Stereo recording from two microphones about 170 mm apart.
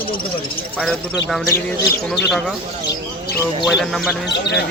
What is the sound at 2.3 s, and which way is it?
Speech, centre (ahead or behind).